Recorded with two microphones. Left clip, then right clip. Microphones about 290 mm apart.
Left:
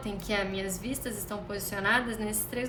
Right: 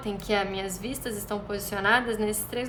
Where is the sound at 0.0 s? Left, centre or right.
Centre.